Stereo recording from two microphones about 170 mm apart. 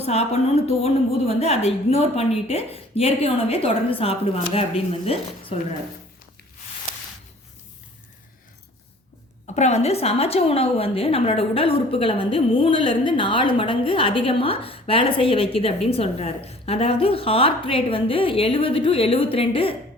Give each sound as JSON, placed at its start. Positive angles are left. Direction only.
{"t": 0.0, "sound": "a woman's voice", "side_deg": 35}
{"t": 9.6, "sound": "a woman's voice", "side_deg": 40}